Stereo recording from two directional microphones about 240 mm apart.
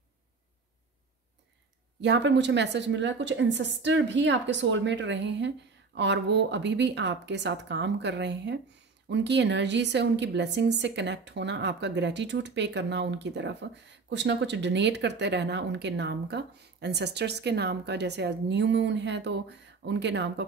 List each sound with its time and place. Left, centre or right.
2.0 s a woman's voice: right